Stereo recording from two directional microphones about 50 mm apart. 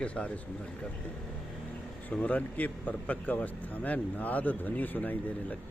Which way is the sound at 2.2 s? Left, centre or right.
Left.